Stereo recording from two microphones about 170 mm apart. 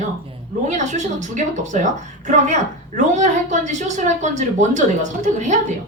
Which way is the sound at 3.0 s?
45° right (ahead or behind).